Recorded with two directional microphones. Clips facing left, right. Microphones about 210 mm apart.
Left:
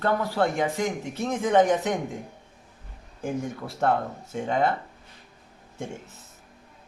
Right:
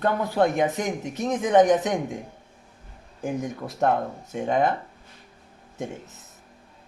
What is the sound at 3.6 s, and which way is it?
Speech, 20° right (ahead or behind).